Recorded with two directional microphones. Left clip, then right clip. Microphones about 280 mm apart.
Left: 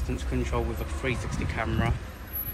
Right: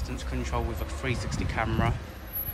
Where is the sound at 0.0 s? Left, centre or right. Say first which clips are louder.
Left 3 dB; centre.